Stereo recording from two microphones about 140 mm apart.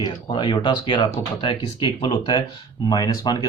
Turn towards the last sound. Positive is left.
turn(degrees=25)  # may be behind; listen again after turning